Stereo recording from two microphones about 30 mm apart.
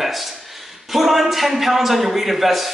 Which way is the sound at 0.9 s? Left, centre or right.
Centre.